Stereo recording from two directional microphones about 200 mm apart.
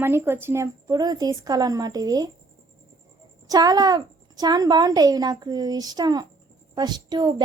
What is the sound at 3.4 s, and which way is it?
A woman's voice, 20° right (ahead or behind).